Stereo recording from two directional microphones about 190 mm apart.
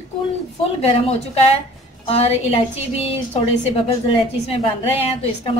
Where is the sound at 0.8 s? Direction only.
30° left (ahead or behind).